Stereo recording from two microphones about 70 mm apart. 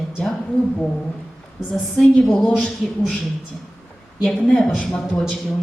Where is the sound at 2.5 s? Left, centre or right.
Centre.